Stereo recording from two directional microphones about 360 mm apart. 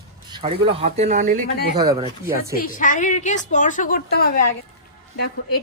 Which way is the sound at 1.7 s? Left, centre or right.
Centre.